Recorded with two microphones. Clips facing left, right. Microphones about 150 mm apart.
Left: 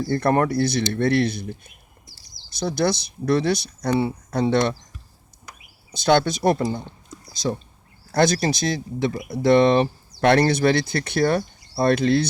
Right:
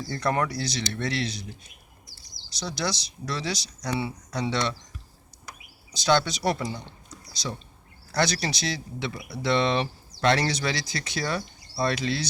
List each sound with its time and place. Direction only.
0.0 s speech: 55° left (ahead or behind)
5.9 s speech: 55° left (ahead or behind)